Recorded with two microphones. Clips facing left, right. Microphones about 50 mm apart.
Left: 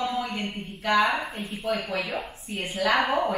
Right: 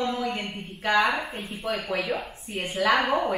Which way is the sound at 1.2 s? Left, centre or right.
Centre.